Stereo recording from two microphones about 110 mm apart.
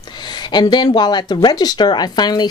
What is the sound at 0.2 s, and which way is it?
Speech, 40° left (ahead or behind).